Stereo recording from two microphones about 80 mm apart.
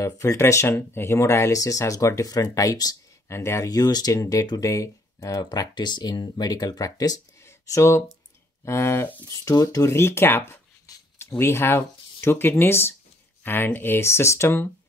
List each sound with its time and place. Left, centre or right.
0.0 s speech: left
3.3 s speech: left
7.4 s a sound: left
8.6 s speech: left
9.4 s speech: left